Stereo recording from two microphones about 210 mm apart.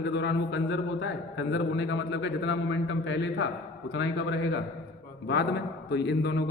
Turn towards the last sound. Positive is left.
turn(degrees=50)  # may be behind; listen again after turning